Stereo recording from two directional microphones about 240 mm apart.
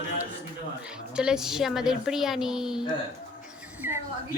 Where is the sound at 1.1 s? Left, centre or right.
Centre.